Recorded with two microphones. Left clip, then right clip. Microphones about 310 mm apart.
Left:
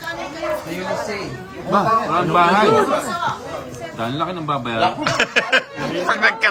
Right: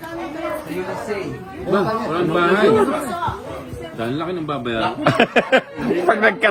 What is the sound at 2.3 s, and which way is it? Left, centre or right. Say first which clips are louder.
Speech: left 3 dB; left.